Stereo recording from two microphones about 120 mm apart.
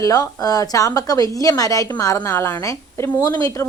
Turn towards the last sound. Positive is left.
turn(degrees=30)  # may be behind; listen again after turning